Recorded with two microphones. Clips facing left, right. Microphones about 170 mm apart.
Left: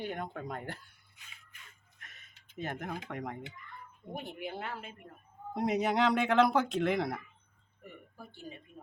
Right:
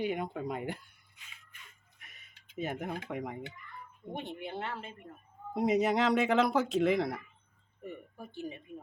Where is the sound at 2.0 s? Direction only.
10° right (ahead or behind).